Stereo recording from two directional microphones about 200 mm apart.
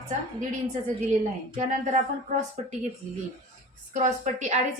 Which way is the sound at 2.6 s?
40° right (ahead or behind).